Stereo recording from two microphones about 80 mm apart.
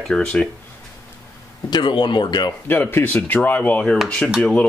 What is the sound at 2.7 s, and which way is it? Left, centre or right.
Speech, left.